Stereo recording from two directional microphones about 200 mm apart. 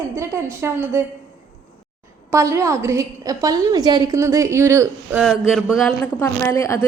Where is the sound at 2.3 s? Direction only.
15° right (ahead or behind).